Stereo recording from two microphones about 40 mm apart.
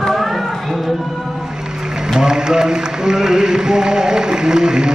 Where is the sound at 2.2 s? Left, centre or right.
Centre.